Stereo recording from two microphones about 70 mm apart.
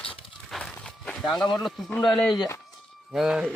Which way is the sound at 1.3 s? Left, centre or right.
Left.